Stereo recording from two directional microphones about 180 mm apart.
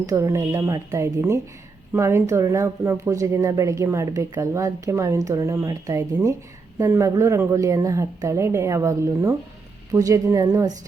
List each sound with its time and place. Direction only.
0.0 s speech: 15° right (ahead or behind)